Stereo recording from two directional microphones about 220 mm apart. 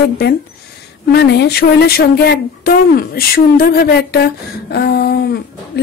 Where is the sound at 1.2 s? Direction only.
50° left (ahead or behind).